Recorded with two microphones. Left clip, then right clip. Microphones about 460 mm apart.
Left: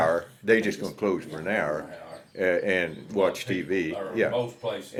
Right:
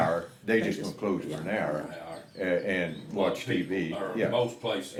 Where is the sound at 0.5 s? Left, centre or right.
Left.